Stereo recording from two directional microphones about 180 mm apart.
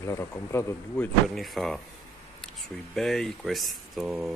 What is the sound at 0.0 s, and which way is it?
Speech, 15° left (ahead or behind).